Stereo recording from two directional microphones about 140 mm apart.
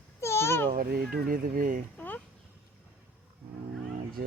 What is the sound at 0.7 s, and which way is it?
Speech, 90° right.